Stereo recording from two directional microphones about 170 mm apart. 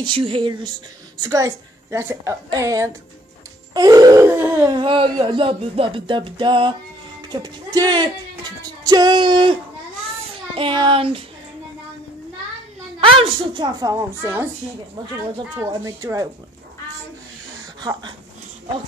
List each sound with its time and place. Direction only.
0.0 s music: 30° right (ahead or behind)
1.2 s a woman's voice: 20° right (ahead or behind)
3.7 s music: 20° right (ahead or behind)
4.7 s music: 30° right (ahead or behind)
7.4 s speech: 25° right (ahead or behind)
10.5 s child singing: 30° right (ahead or behind)
13.2 s music: 25° right (ahead or behind)
15.5 s a woman's voice: 20° right (ahead or behind)
17.7 s speech: 25° right (ahead or behind)